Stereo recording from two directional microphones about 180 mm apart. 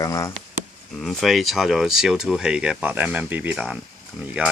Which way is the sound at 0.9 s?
Centre (ahead or behind).